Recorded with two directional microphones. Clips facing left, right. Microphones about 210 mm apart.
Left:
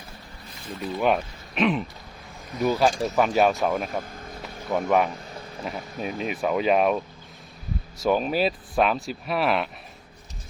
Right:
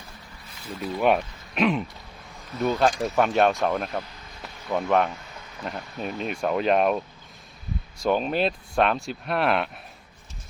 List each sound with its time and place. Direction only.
0.7 s speech: 5° right (ahead or behind)
3.8 s vehicle: 50° left (ahead or behind)
4.7 s speech: 5° left (ahead or behind)
5.3 s a sound: 30° left (ahead or behind)
5.6 s speech: centre (ahead or behind)